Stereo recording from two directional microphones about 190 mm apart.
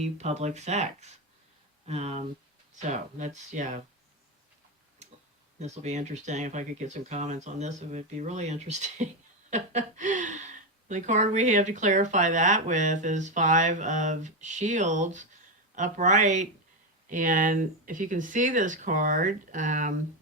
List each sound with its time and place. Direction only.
0.0 s speech: 35° right (ahead or behind)
5.5 s speech: 35° right (ahead or behind)